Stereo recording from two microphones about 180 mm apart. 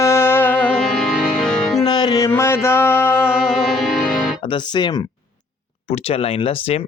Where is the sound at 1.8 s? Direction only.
25° left (ahead or behind).